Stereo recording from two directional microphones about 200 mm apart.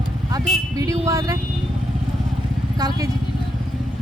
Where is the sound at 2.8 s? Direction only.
20° right (ahead or behind).